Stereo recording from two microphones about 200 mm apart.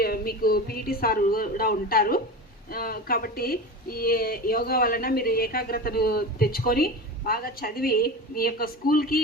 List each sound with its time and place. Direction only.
0.0 s speech: 50° left (ahead or behind)